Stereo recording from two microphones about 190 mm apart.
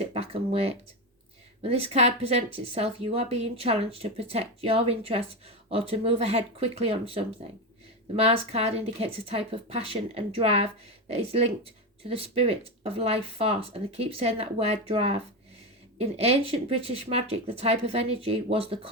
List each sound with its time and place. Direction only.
0.0 s a woman's voice: 30° right (ahead or behind)